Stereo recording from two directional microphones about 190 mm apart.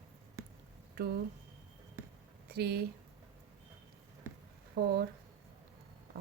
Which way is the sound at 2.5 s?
55° right (ahead or behind).